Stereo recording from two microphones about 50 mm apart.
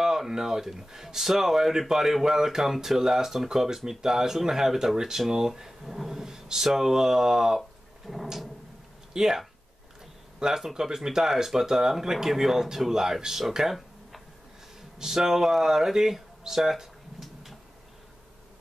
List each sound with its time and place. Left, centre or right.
0.0 s speech: centre
8.1 s a sound: centre
9.1 s speech: centre